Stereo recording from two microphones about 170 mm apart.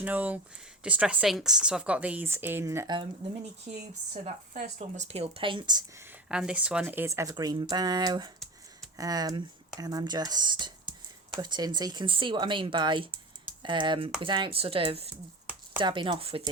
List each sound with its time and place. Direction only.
0.0 s speech: 10° right (ahead or behind)
3.7 s speech: 40° right (ahead or behind); by 5.8 s 25° right (ahead or behind)
6.2 s speech: 5° right (ahead or behind); by 16.4 s 30° right (ahead or behind)